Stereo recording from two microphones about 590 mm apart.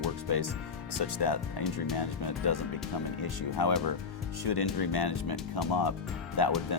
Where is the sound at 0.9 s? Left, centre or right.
Left.